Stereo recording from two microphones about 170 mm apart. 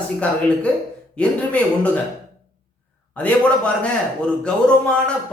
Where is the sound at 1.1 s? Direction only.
5° left (ahead or behind).